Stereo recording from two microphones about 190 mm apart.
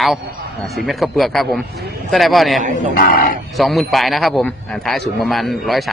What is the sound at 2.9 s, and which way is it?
Speech, 50° left (ahead or behind).